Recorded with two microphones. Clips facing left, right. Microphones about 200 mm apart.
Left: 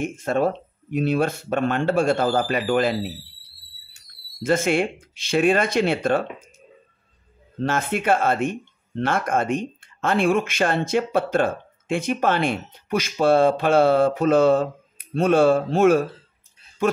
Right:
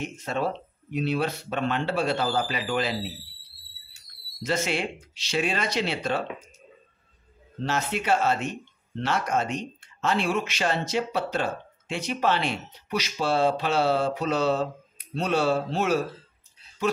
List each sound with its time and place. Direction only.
0.0 s speech: 50° left (ahead or behind)
7.6 s speech: 50° left (ahead or behind)